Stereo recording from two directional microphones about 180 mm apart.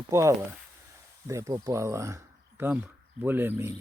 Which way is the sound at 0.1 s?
15° right (ahead or behind).